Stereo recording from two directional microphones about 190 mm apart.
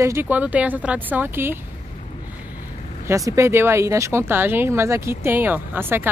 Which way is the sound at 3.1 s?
15° right (ahead or behind).